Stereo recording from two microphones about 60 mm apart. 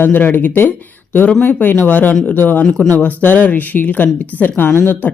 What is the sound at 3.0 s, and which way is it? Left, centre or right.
Speech, left.